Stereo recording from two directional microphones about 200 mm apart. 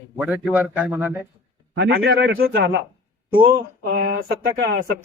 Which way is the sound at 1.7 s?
65° right (ahead or behind).